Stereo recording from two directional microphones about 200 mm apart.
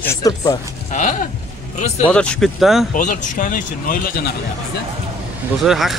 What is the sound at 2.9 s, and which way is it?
Speech, 40° left (ahead or behind).